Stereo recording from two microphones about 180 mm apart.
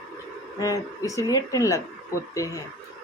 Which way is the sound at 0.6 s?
20° left (ahead or behind).